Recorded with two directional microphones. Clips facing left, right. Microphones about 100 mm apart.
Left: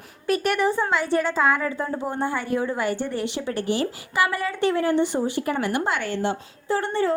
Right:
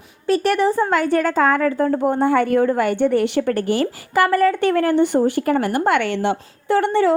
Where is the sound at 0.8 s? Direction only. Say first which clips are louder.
Right 5 dB; 50° right (ahead or behind); by 3.5 s 65° right (ahead or behind).